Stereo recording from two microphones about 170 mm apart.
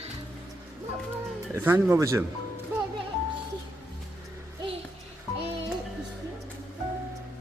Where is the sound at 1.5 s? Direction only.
15° right (ahead or behind).